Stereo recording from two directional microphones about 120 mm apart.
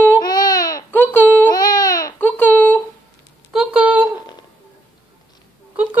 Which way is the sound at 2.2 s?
15° left (ahead or behind).